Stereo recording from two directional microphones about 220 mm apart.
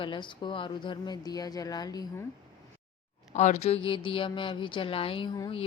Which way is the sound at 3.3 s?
30° left (ahead or behind).